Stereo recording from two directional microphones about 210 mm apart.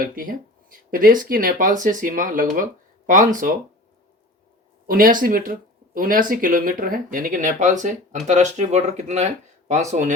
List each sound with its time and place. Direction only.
0.0 s speech: 45° right (ahead or behind)
4.9 s speech: 45° right (ahead or behind)